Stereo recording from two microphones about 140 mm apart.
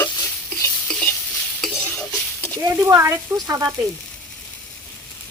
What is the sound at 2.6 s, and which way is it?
Speech, 25° right (ahead or behind).